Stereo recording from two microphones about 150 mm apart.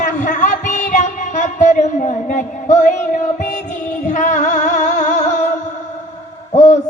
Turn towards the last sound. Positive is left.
turn(degrees=50)  # may be behind; listen again after turning